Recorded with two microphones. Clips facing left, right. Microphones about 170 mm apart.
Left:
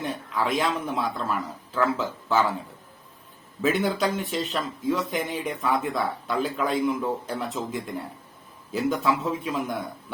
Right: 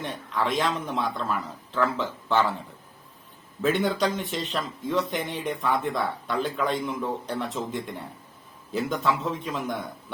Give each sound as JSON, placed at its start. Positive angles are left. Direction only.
{"t": 0.0, "sound": "speech", "side_deg": 5}
{"t": 3.6, "sound": "a man's voice", "side_deg": 5}